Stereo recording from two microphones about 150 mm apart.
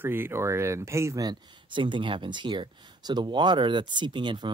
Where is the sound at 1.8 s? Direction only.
35° right (ahead or behind).